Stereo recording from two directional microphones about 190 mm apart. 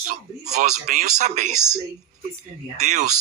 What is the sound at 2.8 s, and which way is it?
Speech, 40° right (ahead or behind).